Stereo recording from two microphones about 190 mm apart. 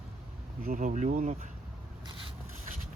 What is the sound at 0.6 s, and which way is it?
Speech, 45° right (ahead or behind).